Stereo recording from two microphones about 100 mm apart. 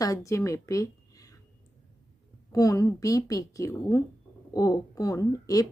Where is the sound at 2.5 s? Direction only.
35° left (ahead or behind).